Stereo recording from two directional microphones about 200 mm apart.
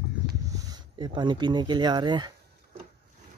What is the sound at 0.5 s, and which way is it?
Speech, 20° right (ahead or behind).